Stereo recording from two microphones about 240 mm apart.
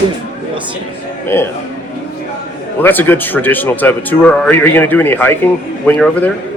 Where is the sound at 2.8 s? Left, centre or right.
Centre.